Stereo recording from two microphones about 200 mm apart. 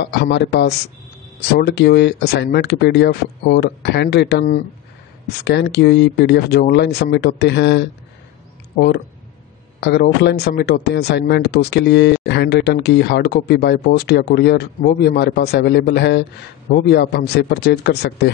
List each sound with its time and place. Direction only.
0.0 s speech: 55° left (ahead or behind)